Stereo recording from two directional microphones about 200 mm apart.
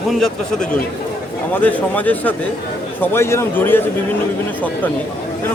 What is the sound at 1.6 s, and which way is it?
Speech, 10° left (ahead or behind).